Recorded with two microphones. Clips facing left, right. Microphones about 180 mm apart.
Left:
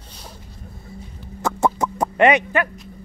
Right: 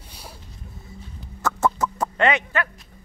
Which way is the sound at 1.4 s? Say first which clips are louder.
Left 2 dB; 15° left (ahead or behind).